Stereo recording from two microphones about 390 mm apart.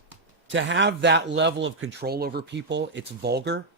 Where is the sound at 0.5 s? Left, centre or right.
Right.